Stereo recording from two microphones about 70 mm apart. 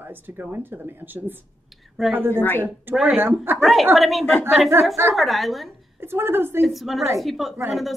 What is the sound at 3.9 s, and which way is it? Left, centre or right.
Speech, centre.